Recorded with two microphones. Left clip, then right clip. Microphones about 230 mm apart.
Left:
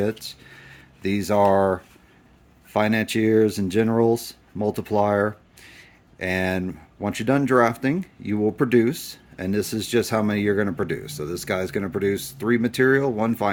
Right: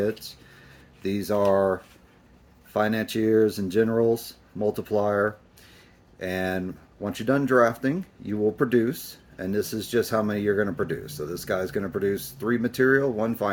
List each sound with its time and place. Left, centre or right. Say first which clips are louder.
0.0 s speech: left 1 dB; left